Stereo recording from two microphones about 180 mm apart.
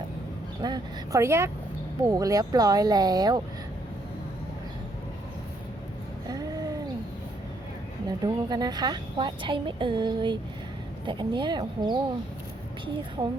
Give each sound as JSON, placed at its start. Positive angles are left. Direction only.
{"t": 0.6, "sound": "a woman's voice", "side_deg": -20}
{"t": 6.2, "sound": "a sound", "side_deg": -20}
{"t": 8.0, "sound": "a woman's voice", "side_deg": -20}
{"t": 13.2, "sound": "a woman's voice", "side_deg": -20}